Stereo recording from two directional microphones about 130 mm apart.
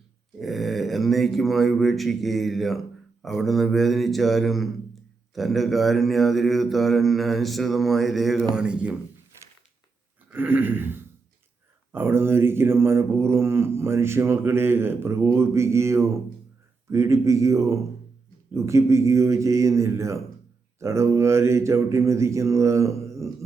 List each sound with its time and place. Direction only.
0.3 s mantra: centre (ahead or behind)
10.3 s a sound: 15° right (ahead or behind)
11.9 s mantra: 15° right (ahead or behind)